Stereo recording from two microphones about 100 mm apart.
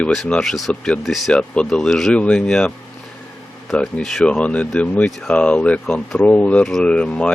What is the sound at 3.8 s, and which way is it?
Speech, 5° left (ahead or behind).